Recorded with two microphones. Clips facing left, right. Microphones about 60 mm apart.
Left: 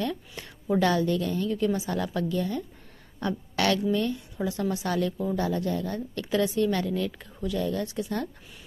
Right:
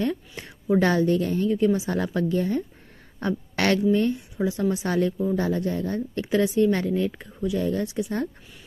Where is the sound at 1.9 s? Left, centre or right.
Right.